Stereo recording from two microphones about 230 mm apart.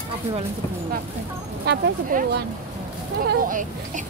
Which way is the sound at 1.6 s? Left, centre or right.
Right.